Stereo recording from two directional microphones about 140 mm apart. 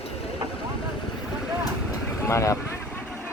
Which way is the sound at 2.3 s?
20° left (ahead or behind).